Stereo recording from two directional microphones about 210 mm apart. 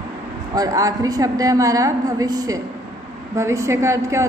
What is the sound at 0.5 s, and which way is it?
A woman's voice, 15° right (ahead or behind).